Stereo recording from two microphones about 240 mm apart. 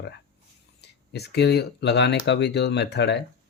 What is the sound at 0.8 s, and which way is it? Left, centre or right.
Speech, left.